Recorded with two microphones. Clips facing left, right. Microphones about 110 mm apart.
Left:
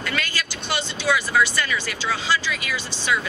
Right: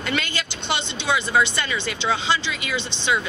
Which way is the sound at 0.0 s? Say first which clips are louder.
Right 2 dB; 25° right (ahead or behind).